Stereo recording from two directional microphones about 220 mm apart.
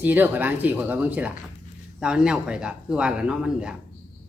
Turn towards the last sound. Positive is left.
turn(degrees=-5)  # may be behind; listen again after turning